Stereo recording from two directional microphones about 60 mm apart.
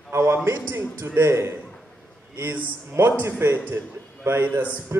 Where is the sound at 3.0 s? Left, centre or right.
Right.